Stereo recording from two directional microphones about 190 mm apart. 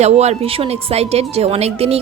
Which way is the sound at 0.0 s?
35° right (ahead or behind).